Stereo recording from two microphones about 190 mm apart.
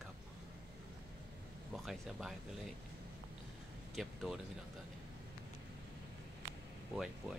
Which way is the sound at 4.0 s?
Centre (ahead or behind).